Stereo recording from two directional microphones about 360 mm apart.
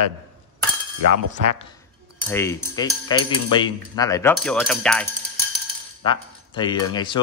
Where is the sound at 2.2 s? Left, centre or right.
Centre.